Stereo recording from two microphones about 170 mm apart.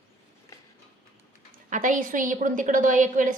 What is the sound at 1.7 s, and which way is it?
A child's voice, 50° right (ahead or behind).